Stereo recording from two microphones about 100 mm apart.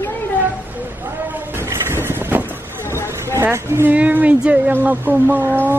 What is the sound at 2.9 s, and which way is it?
Vehicle, 25° left (ahead or behind).